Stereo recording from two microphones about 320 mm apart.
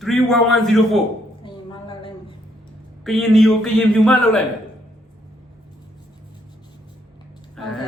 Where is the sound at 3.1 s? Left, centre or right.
Centre.